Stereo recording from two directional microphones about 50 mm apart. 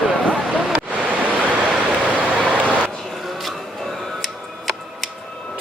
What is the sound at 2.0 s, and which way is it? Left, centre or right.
Vehicle, right.